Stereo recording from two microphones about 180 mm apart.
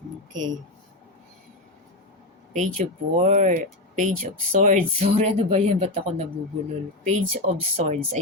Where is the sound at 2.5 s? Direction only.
45° right (ahead or behind).